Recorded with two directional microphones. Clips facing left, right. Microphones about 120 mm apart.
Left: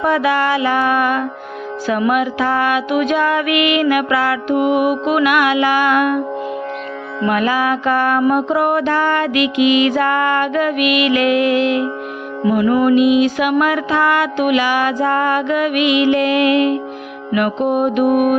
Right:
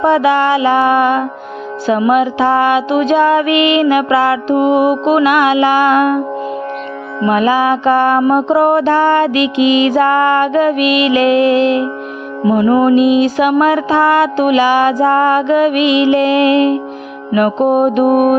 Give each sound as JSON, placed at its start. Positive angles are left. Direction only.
{"t": 0.0, "sound": "music", "side_deg": -25}